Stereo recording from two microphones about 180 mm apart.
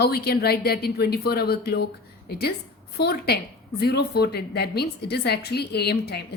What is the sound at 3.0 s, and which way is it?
A woman's voice, 60° left (ahead or behind).